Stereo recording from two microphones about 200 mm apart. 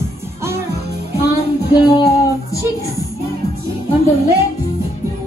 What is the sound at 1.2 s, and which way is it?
Music, 55° left (ahead or behind).